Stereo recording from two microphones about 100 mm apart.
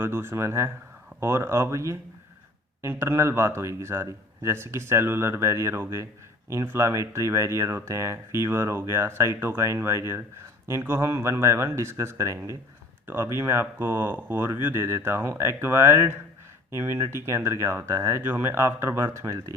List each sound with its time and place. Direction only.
0.0 s speech: 25° right (ahead or behind)